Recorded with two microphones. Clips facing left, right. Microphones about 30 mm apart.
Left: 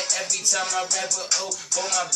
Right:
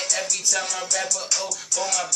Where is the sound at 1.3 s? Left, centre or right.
Left.